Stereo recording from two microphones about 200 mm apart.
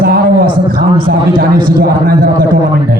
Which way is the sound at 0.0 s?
50° right (ahead or behind).